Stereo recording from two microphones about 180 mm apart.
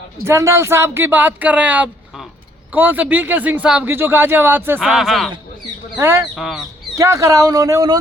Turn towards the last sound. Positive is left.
turn(degrees=-20)  # may be behind; listen again after turning